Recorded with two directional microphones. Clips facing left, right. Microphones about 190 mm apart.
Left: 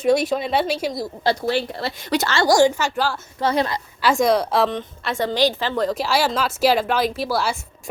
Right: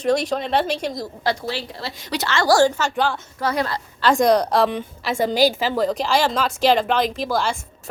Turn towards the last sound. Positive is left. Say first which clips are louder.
# even
turn(degrees=5)  # may be behind; listen again after turning